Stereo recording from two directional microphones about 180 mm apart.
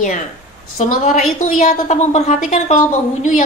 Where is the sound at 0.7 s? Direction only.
45° left (ahead or behind).